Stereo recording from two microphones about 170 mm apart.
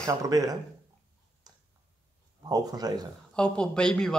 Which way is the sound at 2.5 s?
20° right (ahead or behind).